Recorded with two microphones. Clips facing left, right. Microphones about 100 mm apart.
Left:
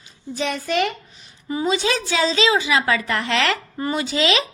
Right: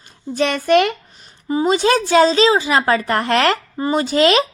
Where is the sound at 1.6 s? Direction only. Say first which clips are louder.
Right 6 dB; 45° right (ahead or behind).